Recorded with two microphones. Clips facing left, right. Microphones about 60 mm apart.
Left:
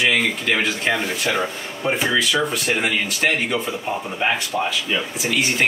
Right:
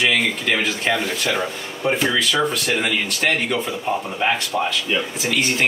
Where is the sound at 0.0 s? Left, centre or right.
Centre.